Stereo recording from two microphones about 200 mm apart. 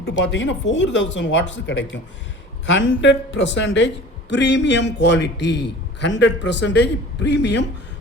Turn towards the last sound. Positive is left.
turn(degrees=60)  # may be behind; listen again after turning